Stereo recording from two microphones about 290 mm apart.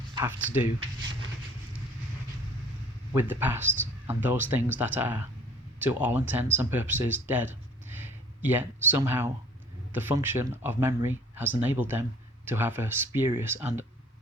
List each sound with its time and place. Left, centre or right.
0.1 s speech: centre
3.2 s speech: centre